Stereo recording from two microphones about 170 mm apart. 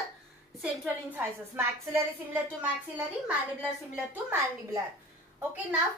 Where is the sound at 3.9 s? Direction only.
10° right (ahead or behind).